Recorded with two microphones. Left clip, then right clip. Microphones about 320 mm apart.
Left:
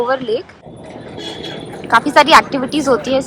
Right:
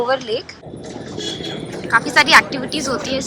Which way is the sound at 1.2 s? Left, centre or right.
Left.